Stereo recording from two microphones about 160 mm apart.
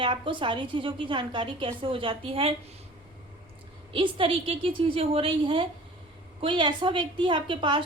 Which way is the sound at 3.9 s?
35° right (ahead or behind).